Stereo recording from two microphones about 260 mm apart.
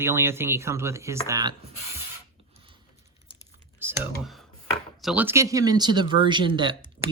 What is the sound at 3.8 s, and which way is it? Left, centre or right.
Computer keyboard, centre.